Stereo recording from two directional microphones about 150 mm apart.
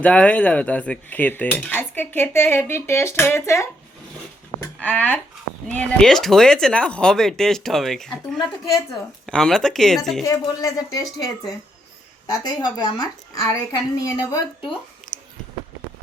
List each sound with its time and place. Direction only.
0.0 s dishes: 10° left (ahead or behind)
4.8 s dishes: 10° left (ahead or behind)
5.7 s speech: 5° left (ahead or behind)
10.2 s a woman's voice: 25° left (ahead or behind)
15.0 s a sound: 5° left (ahead or behind)